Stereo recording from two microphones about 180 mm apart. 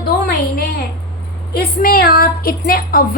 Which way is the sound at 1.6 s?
55° left (ahead or behind).